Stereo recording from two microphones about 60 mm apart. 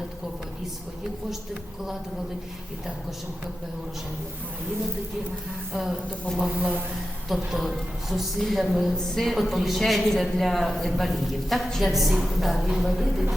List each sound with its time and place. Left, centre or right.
5.7 s speech: centre
6.6 s speech: right
7.3 s a woman's voice: centre